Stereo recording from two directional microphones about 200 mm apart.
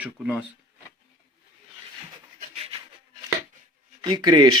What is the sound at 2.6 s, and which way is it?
Rub, 30° right (ahead or behind).